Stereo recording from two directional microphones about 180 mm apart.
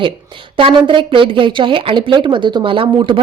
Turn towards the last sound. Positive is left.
turn(degrees=-30)  # may be behind; listen again after turning